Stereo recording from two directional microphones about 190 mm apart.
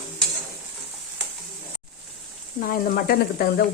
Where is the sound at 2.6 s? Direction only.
45° left (ahead or behind).